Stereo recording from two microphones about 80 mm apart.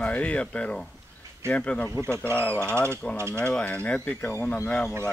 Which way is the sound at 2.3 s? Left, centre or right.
Right.